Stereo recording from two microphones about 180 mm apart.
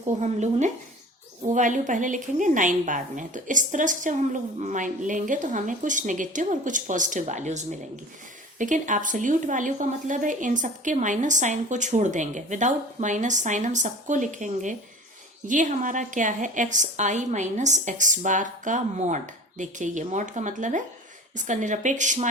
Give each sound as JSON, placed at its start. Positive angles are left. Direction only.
{"t": 0.2, "sound": "a woman's voice", "side_deg": -40}